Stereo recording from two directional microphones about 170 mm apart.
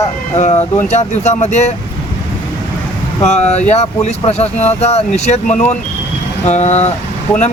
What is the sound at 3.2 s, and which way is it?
Speech, 40° left (ahead or behind).